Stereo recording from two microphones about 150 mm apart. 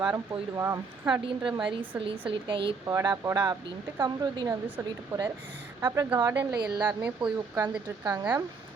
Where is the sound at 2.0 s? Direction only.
35° right (ahead or behind).